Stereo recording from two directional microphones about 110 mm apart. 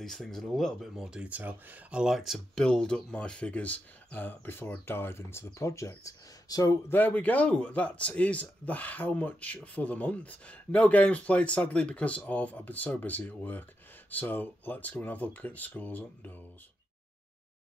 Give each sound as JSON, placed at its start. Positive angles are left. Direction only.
{"t": 0.0, "sound": "speech", "side_deg": 5}
{"t": 7.0, "sound": "speech", "side_deg": 15}